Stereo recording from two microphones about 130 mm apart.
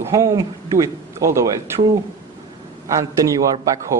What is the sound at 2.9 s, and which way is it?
Speech, 25° right (ahead or behind).